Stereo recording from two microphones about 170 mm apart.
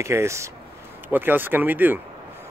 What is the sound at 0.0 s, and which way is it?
Speech, 15° right (ahead or behind).